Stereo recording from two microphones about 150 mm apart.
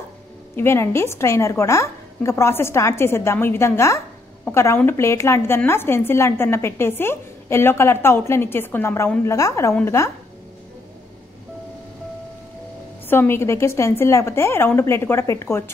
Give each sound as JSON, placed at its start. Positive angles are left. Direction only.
{"t": 0.6, "sound": "a woman's voice", "side_deg": 15}
{"t": 13.1, "sound": "a woman's voice", "side_deg": 15}